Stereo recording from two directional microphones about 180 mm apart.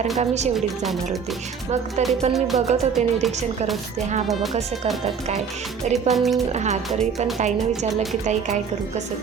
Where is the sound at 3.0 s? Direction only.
40° right (ahead or behind).